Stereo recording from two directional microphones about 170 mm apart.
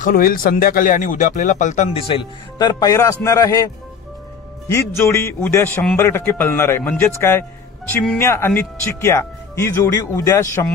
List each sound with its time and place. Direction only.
0.0 s a man's voice: 55° left (ahead or behind); by 10.7 s 20° left (ahead or behind)